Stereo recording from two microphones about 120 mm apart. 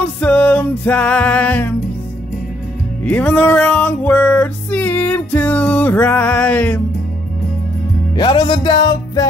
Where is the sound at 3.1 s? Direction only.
10° left (ahead or behind).